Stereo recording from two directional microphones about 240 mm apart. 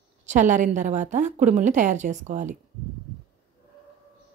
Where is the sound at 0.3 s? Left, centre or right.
Right.